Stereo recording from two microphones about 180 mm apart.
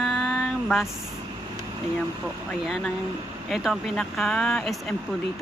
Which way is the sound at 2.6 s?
Centre (ahead or behind).